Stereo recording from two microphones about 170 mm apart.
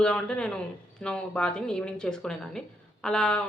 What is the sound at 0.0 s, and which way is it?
A woman's voice, 5° left (ahead or behind).